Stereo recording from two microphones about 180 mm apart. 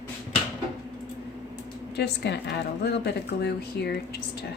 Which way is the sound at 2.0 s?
70° left (ahead or behind).